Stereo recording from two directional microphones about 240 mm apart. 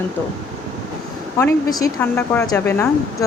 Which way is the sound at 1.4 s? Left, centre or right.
Centre.